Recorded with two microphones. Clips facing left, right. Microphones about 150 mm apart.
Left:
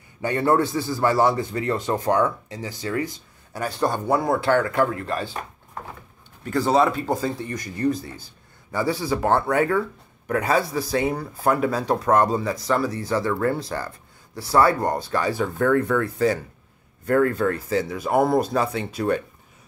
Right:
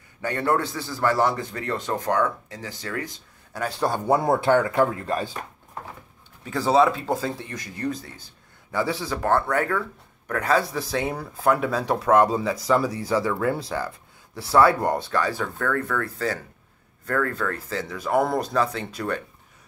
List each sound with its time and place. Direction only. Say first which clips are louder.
0.2 s speech: left 4 dB; 10° left (ahead or behind)
3.5 s speech: left 1 dB; centre (ahead or behind)
4.1 s speech: right 2 dB; 20° right (ahead or behind)
6.4 s speech: even; 5° right (ahead or behind)
15.0 s speech: left 2 dB; 10° left (ahead or behind)